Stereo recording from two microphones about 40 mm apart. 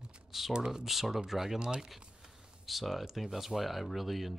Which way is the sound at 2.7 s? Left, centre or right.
Centre.